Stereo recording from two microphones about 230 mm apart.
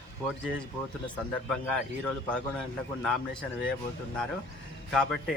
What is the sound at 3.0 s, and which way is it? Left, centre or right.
Speech, centre.